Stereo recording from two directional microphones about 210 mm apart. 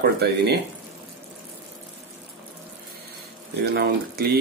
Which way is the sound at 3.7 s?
45° right (ahead or behind).